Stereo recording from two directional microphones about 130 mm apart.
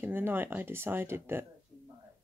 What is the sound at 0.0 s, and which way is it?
Speech, 15° right (ahead or behind).